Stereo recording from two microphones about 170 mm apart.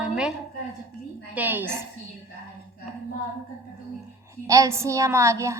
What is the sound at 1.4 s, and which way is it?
Speech, 10° right (ahead or behind).